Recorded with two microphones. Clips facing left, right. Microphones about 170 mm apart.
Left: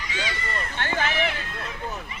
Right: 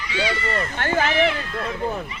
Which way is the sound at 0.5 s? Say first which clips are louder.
Right 6 dB; 45° right (ahead or behind).